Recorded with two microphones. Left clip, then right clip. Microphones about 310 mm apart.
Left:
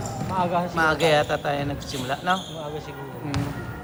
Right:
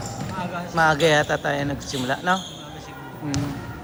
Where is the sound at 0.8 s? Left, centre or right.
Right.